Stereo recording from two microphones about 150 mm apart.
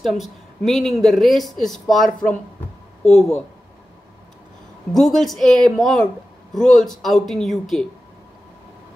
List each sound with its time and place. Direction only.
0.0 s speech: centre (ahead or behind)
4.9 s speech: centre (ahead or behind)